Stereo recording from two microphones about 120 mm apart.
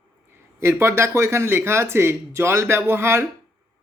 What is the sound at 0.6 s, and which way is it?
Speech, 20° right (ahead or behind).